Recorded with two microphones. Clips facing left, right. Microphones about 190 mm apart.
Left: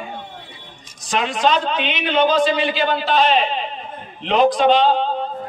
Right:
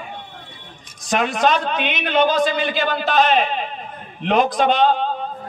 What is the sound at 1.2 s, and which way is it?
A man's voice, 50° right (ahead or behind).